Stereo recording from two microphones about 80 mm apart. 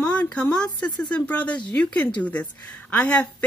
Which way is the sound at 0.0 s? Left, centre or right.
Centre.